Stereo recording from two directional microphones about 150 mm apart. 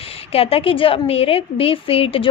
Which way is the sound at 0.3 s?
40° left (ahead or behind).